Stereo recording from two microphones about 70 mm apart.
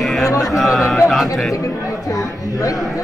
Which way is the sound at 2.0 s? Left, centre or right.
Left.